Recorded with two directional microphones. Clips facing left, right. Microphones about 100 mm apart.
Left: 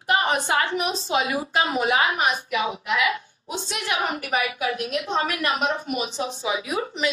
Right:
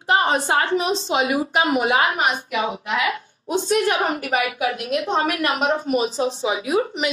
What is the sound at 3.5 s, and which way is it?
A woman's voice, 45° right (ahead or behind).